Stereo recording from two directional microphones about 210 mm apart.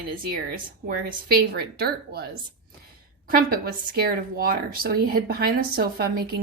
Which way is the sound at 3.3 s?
45° right (ahead or behind).